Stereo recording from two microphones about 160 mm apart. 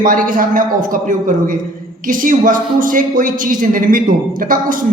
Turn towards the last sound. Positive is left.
turn(degrees=-60)  # may be behind; listen again after turning